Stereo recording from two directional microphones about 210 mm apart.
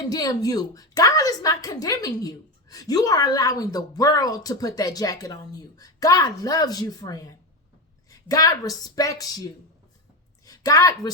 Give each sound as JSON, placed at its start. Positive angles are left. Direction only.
{"t": 0.1, "sound": "a woman's voice", "side_deg": 15}